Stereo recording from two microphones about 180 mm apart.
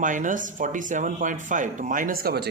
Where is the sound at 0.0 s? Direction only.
45° right (ahead or behind).